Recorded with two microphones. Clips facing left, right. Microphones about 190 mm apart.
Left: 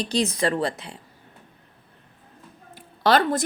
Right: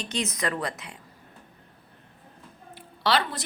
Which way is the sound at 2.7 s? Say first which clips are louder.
Left 6 dB; 45° left (ahead or behind).